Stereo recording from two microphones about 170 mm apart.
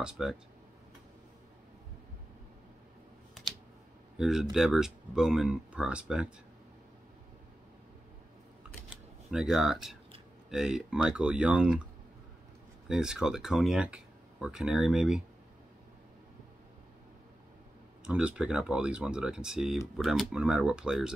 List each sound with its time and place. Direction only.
0.0 s speech: 5° right (ahead or behind)
4.2 s speech: 5° right (ahead or behind)
9.3 s speech: centre (ahead or behind)
12.8 s speech: 5° right (ahead or behind)
18.0 s speech: 5° right (ahead or behind)